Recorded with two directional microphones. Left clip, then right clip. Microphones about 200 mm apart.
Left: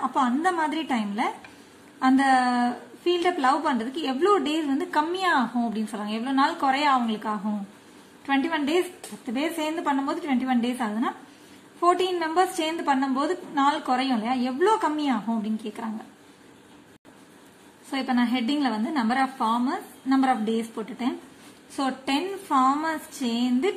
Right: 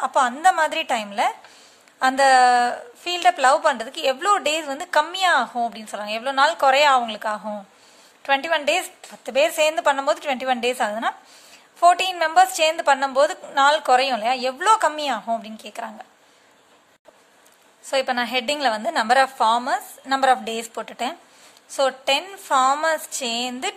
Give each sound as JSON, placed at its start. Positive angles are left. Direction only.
{"t": 0.0, "sound": "a woman's voice", "side_deg": -45}
{"t": 17.9, "sound": "a woman's voice", "side_deg": -50}
{"t": 21.7, "sound": "a woman's voice", "side_deg": -45}